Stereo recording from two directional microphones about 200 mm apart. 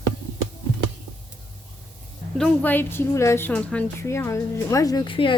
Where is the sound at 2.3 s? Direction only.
5° left (ahead or behind).